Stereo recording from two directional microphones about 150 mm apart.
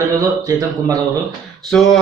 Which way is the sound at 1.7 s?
5° left (ahead or behind).